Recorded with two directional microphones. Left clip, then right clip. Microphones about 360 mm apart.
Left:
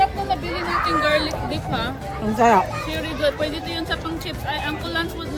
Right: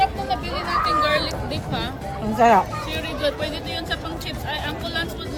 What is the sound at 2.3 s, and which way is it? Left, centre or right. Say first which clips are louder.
Speech: right 1 dB; centre.